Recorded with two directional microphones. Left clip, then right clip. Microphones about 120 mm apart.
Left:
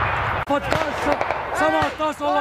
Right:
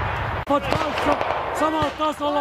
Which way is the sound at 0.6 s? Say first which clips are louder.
Even; centre (ahead or behind).